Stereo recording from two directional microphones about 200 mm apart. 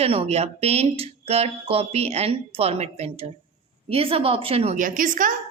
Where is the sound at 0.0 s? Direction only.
30° right (ahead or behind).